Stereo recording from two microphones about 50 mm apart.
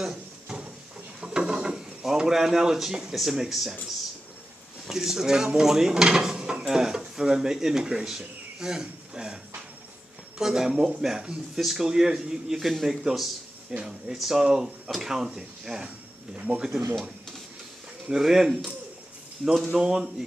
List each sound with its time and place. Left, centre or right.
0.0 s drawer open or close: centre
1.2 s a sound: centre
4.8 s speech: centre
10.4 s a man's voice: centre
12.5 s speech: centre
13.7 s a man's voice: centre
14.1 s a man's voice: centre
16.3 s speech: right
18.1 s a man's voice: centre
19.7 s a man's voice: centre